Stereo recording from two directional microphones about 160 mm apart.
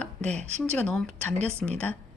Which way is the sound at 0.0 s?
5° left (ahead or behind).